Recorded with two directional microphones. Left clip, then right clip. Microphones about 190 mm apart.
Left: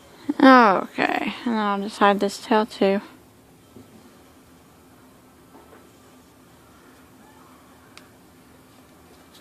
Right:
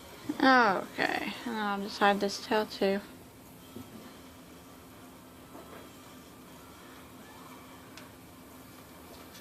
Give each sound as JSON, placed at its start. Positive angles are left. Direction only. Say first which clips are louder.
{"t": 0.3, "sound": "speech", "louder": "left 10 dB", "side_deg": 45}